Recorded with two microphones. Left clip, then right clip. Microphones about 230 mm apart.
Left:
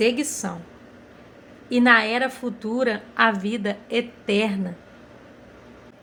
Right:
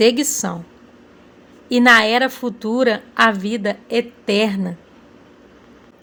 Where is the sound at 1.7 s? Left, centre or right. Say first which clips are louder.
Right 6 dB; right.